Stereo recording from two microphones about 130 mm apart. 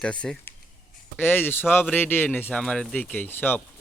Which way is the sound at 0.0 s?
5° left (ahead or behind).